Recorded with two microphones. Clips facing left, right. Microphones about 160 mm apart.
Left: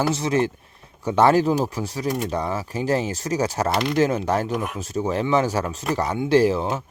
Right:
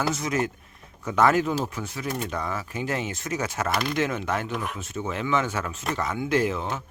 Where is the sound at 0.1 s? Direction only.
30° left (ahead or behind).